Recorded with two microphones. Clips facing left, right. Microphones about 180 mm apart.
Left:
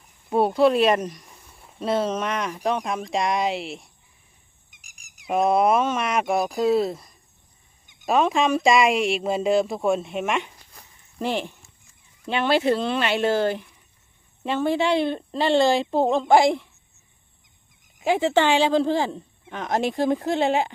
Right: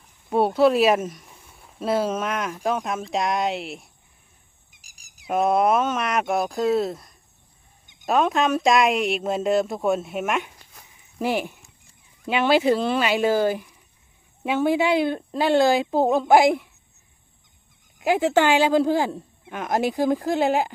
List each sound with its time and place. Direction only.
0.3 s speech: centre (ahead or behind)
4.7 s a sound: 35° right (ahead or behind)
5.3 s speech: centre (ahead or behind)
18.0 s speech: centre (ahead or behind)